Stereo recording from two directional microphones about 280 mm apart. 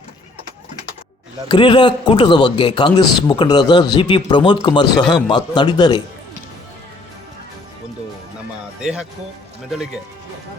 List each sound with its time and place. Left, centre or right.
1.5 s a man's voice: centre
8.8 s speech: centre